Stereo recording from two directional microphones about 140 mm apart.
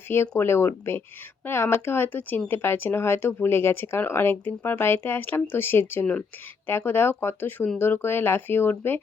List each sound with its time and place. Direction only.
0.1 s speech: 15° left (ahead or behind)